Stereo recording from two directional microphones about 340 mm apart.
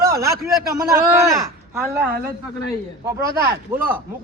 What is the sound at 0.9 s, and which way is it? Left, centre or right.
Speech, centre.